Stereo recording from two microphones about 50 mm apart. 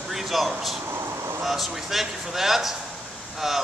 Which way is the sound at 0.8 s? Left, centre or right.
Right.